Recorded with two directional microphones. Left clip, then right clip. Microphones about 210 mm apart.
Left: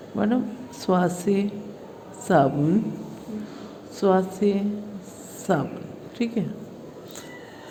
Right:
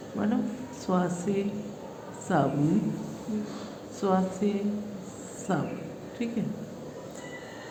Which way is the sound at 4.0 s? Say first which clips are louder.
Left 6 dB; 40° left (ahead or behind).